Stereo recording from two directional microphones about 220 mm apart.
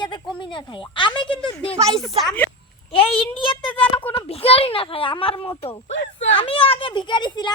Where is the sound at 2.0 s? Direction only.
Centre (ahead or behind).